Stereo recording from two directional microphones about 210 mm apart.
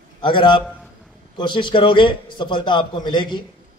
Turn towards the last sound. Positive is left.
turn(degrees=20)  # may be behind; listen again after turning